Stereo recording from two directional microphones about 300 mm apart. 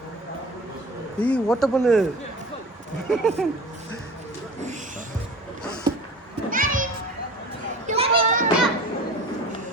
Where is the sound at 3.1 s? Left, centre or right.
Centre.